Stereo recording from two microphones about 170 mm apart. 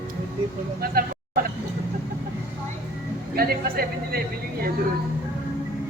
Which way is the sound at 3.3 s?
60° right (ahead or behind).